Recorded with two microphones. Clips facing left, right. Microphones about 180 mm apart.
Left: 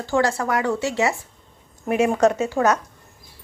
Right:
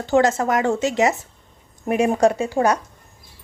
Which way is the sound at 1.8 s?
35° right (ahead or behind).